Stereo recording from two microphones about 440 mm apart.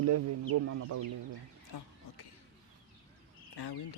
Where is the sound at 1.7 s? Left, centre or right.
Left.